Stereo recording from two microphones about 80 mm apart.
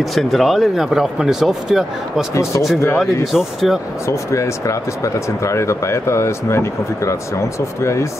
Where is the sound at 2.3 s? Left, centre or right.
Left.